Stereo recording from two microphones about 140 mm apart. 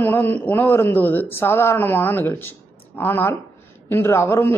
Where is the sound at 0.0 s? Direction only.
15° left (ahead or behind).